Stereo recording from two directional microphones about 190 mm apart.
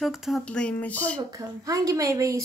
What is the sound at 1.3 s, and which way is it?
A woman's voice, 15° right (ahead or behind).